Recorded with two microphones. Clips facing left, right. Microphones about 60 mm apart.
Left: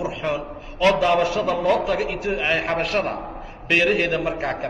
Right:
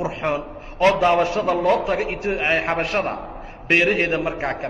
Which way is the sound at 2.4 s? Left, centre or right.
Right.